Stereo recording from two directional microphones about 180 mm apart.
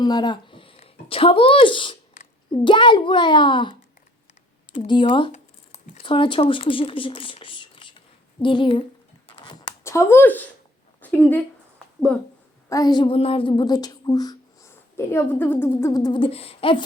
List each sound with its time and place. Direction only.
0.0 s a child's voice: 25° left (ahead or behind)
5.3 s speech: 40° left (ahead or behind)
9.3 s a sound: 25° left (ahead or behind)
11.0 s speech: 10° left (ahead or behind)
12.6 s speech: 20° left (ahead or behind)